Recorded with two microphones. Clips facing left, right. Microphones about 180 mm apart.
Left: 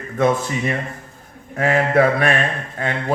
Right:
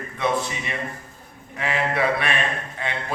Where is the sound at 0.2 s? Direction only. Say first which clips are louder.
Left 6 dB; 45° left (ahead or behind).